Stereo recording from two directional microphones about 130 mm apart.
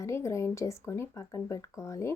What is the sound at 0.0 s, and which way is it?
Speech, 25° left (ahead or behind).